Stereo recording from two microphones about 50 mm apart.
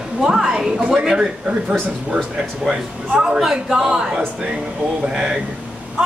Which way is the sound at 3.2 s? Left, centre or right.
Centre.